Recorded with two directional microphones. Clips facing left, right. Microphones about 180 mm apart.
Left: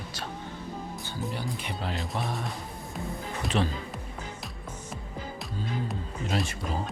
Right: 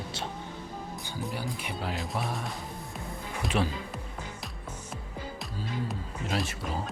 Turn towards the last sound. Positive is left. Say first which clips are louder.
# left 2 dB
turn(degrees=0)  # may be behind; listen again after turning